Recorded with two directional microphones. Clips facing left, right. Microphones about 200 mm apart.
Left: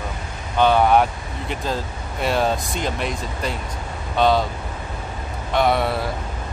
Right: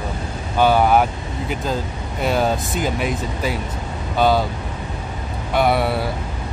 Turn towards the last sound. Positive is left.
turn(degrees=-5)  # may be behind; listen again after turning